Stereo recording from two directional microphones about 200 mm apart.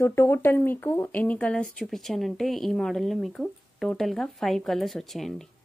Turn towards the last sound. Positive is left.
turn(degrees=0)  # may be behind; listen again after turning